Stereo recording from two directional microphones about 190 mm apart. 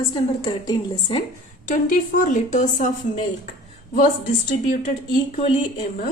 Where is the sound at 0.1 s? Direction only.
25° left (ahead or behind).